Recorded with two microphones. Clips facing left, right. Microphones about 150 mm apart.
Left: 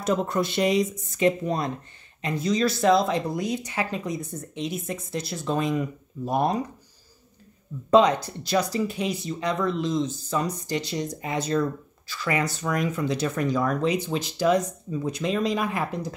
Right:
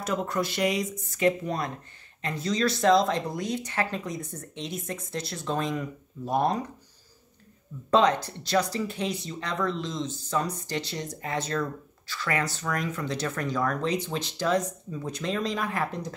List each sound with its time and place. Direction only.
0.0 s speech: 25° left (ahead or behind)
7.9 s speech: 10° left (ahead or behind)